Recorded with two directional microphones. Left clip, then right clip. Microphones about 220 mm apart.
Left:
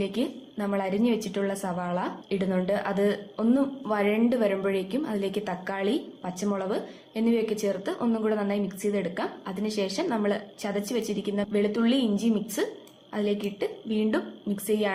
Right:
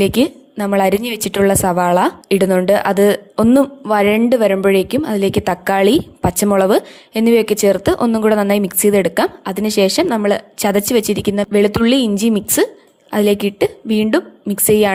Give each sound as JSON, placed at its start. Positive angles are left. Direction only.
{"t": 0.0, "sound": "a woman's voice", "side_deg": -45}